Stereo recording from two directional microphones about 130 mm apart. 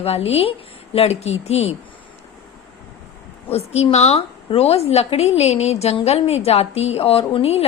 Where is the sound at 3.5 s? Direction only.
50° left (ahead or behind).